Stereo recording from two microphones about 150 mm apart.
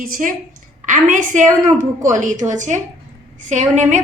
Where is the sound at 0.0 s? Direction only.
65° right (ahead or behind).